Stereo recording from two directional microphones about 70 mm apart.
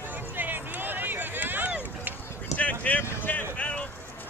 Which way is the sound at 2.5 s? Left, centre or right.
Left.